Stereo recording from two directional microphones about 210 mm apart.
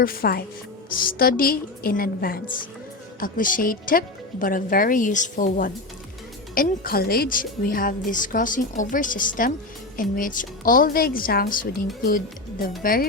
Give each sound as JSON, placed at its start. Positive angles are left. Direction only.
{"t": 0.0, "sound": "a woman's voice", "side_deg": 45}